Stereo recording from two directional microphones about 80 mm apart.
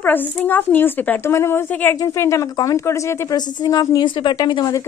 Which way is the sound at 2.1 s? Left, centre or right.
Left.